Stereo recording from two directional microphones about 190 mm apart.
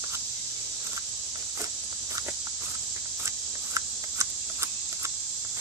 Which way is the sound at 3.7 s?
15° right (ahead or behind).